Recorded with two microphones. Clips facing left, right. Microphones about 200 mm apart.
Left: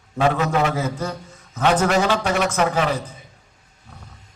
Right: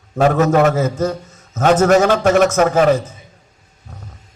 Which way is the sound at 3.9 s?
45° right (ahead or behind).